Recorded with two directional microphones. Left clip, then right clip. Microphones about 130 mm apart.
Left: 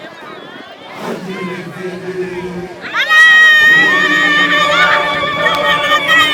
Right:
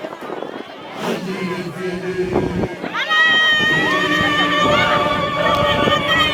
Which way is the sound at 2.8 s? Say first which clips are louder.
Left 8 dB; 40° left (ahead or behind).